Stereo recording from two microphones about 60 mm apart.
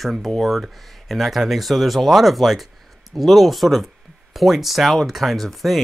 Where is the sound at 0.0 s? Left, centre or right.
Centre.